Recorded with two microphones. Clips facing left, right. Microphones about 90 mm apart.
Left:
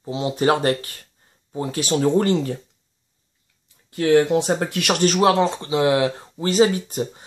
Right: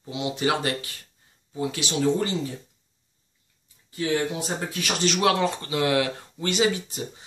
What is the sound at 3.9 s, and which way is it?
Speech, 65° left (ahead or behind).